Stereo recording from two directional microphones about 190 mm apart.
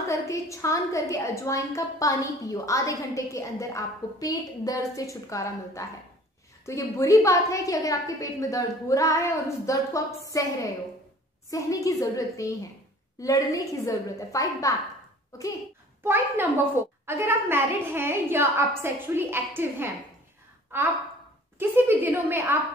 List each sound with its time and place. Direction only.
0.1 s a woman's voice: 15° left (ahead or behind)
11.5 s a woman's voice: 20° left (ahead or behind)
16.0 s a woman's voice: 10° right (ahead or behind)
20.7 s gasp: 10° right (ahead or behind)
21.5 s a woman's voice: 10° right (ahead or behind)